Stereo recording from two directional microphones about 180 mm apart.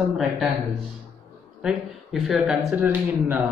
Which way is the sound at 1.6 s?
Centre (ahead or behind).